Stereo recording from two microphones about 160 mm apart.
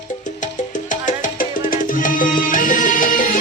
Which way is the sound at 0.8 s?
55° left (ahead or behind).